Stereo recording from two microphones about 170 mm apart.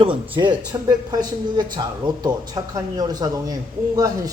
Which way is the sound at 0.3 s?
25° right (ahead or behind).